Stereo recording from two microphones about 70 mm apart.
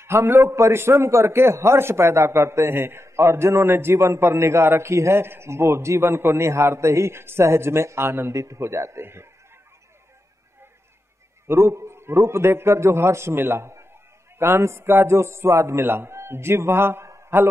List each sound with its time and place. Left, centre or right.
0.0 s a man's voice: right
11.4 s a man's voice: right
17.1 s a sound: right